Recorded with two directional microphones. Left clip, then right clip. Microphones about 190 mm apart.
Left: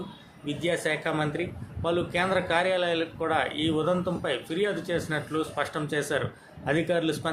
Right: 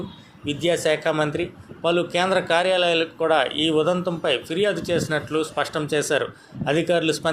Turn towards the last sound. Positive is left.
turn(degrees=-15)  # may be behind; listen again after turning